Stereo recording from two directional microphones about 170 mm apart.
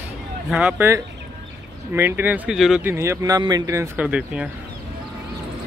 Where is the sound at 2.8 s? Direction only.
15° right (ahead or behind).